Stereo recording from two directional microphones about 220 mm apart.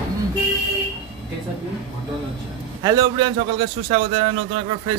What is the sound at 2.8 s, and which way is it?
A man's voice, 20° right (ahead or behind).